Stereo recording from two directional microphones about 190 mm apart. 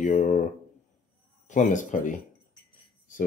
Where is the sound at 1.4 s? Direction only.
40° left (ahead or behind).